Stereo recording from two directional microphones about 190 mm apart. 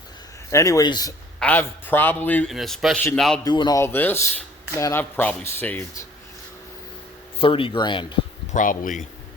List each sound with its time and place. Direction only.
0.5 s speech: 15° left (ahead or behind)
1.4 s a man's voice: 10° left (ahead or behind)
3.4 s speech: 20° left (ahead or behind)
7.3 s speech: 30° left (ahead or behind)
8.5 s speech: 45° left (ahead or behind)